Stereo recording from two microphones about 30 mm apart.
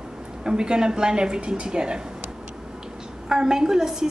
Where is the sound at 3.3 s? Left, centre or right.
Right.